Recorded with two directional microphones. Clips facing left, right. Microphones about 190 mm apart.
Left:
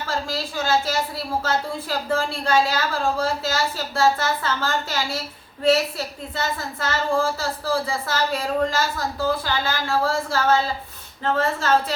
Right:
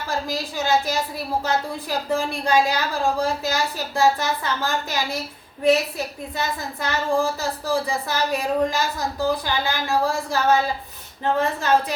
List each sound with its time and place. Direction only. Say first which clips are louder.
0.1 s a woman's voice: right 1 dB; 15° right (ahead or behind)